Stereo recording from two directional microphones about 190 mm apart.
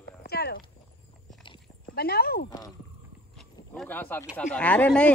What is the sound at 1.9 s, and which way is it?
Speech, 55° left (ahead or behind).